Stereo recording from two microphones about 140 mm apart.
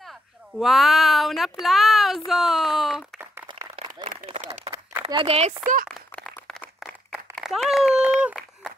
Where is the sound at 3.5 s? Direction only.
25° right (ahead or behind).